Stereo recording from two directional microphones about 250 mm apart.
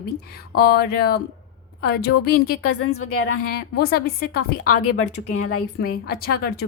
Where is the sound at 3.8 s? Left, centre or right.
Left.